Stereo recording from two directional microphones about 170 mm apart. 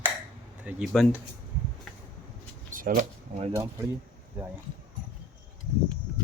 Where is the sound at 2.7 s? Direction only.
50° right (ahead or behind).